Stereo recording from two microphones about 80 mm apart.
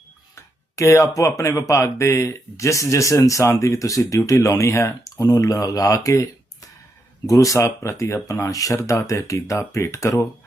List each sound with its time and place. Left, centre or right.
0.8 s speech: left